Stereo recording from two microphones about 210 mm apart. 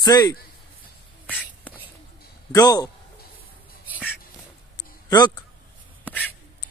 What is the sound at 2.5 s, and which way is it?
Speech, 15° left (ahead or behind).